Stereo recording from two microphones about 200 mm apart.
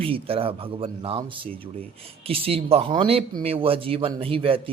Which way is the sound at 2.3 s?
30° right (ahead or behind).